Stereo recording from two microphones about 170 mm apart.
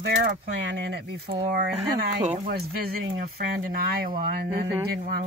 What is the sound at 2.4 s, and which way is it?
Speech, 60° right (ahead or behind).